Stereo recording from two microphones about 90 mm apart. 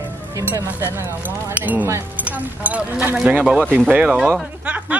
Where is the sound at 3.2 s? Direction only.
10° right (ahead or behind).